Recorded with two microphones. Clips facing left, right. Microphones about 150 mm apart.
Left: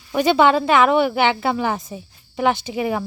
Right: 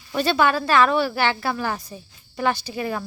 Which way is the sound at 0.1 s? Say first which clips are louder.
Left 5 dB; 15° left (ahead or behind).